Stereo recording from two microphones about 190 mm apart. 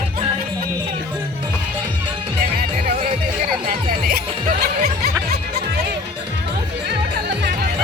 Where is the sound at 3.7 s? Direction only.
50° right (ahead or behind).